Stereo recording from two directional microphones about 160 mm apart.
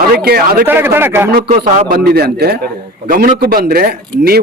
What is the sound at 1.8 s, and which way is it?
Speech, 70° right (ahead or behind).